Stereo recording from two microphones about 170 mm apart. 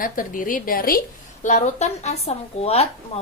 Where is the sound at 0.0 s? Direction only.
55° left (ahead or behind).